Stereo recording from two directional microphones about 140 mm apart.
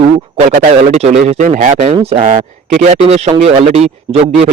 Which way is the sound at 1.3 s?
65° right (ahead or behind).